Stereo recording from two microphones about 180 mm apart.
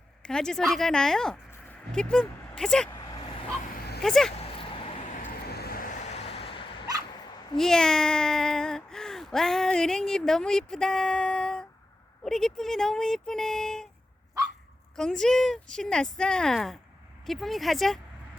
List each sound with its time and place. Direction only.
0.2 s speech: 5° left (ahead or behind)
2.9 s vehicle: 25° left (ahead or behind)
4.0 s speech: 5° left (ahead or behind)
4.5 s a sound: 30° left (ahead or behind)
5.1 s vehicle: 50° left (ahead or behind)
6.1 s vehicle: 30° left (ahead or behind)
7.5 s speech: 5° left (ahead or behind)
14.9 s speech: 5° left (ahead or behind)